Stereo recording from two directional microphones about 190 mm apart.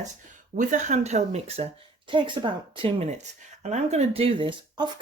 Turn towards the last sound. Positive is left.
turn(degrees=-25)  # may be behind; listen again after turning